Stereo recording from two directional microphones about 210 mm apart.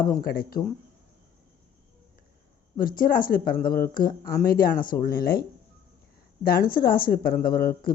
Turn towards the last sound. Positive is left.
turn(degrees=45)  # may be behind; listen again after turning